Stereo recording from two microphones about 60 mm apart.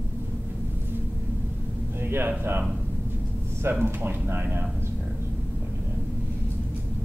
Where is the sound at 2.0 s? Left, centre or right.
Right.